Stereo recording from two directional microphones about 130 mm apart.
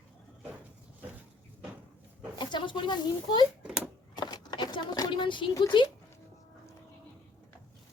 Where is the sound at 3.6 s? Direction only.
5° right (ahead or behind).